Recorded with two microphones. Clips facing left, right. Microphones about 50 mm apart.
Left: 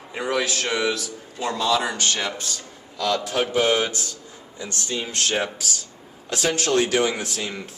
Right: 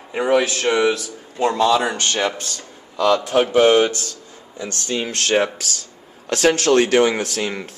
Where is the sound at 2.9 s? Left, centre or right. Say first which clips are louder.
Right 7 dB; centre.